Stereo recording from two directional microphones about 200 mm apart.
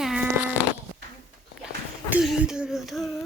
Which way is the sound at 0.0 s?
Centre (ahead or behind).